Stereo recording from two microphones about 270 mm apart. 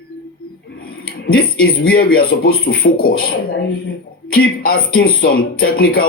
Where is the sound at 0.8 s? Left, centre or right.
Left.